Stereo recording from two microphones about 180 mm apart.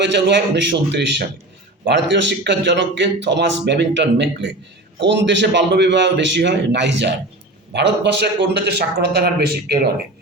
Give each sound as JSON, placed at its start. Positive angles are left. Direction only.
{"t": 0.0, "sound": "a man's voice", "side_deg": -75}
{"t": 1.9, "sound": "a man's voice", "side_deg": -85}